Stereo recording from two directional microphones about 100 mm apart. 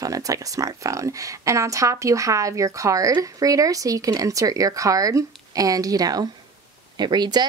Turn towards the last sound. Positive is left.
turn(degrees=-45)  # may be behind; listen again after turning